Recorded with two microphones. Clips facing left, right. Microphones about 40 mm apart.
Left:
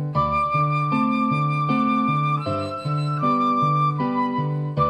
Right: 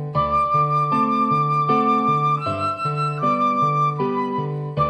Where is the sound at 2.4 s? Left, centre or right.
Centre.